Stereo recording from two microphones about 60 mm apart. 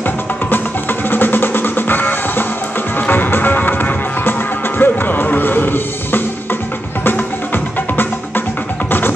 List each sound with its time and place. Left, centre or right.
1.1 s music: left